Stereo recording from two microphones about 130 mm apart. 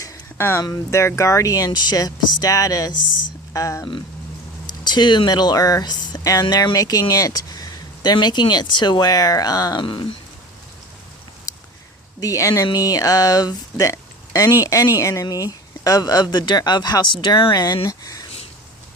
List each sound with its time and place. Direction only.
0.0 s a sound: 20° left (ahead or behind)
0.6 s speech: 25° left (ahead or behind)
12.2 s speech: 25° left (ahead or behind)